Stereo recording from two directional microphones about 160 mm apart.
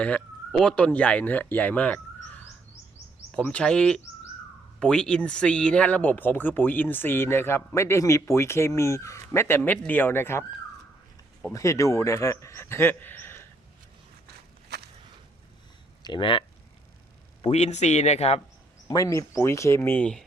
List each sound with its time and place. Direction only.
0.6 s speech: 5° left (ahead or behind)
3.3 s speech: 5° left (ahead or behind)
11.5 s speech: 20° left (ahead or behind)
14.7 s walk: 90° right
16.0 s speech: 30° left (ahead or behind)
17.4 s speech: 45° left (ahead or behind)
18.9 s speech: 20° left (ahead or behind)